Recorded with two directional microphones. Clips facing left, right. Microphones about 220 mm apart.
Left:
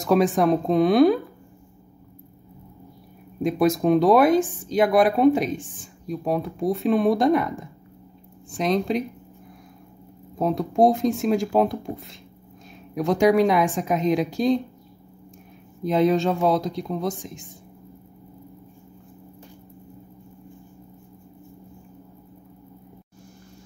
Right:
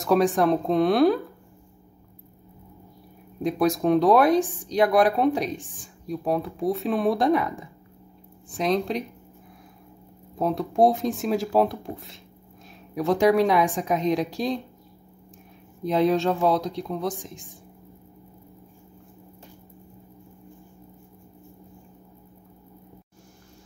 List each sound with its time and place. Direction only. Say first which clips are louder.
0.0 s speech: left 1 dB; centre (ahead or behind)
3.4 s speech: left 2 dB; centre (ahead or behind)
10.3 s speech: left 2 dB; centre (ahead or behind)
15.8 s speech: left 2 dB; centre (ahead or behind)